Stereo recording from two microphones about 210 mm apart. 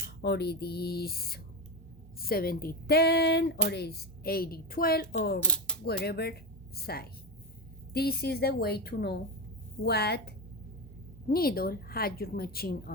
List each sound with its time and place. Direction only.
0.2 s speech: 50° left (ahead or behind)
5.4 s a sound: 5° left (ahead or behind)
5.8 s speech: 50° left (ahead or behind)